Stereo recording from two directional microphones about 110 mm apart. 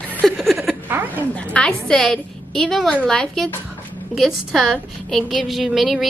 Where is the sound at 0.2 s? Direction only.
Centre (ahead or behind).